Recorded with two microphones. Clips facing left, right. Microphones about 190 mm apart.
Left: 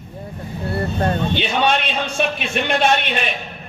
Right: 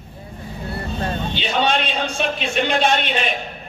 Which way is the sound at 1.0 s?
55° left (ahead or behind).